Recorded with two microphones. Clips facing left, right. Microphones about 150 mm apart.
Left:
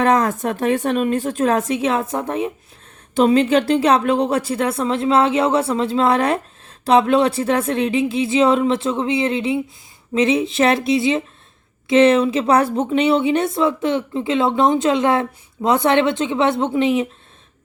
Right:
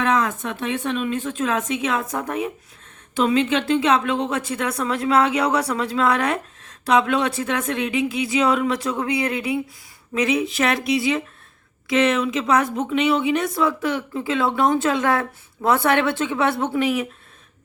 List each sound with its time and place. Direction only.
0.0 s a woman's voice: 40° left (ahead or behind); by 17.1 s 25° left (ahead or behind)